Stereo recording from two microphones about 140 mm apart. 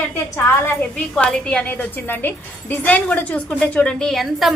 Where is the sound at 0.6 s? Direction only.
10° left (ahead or behind).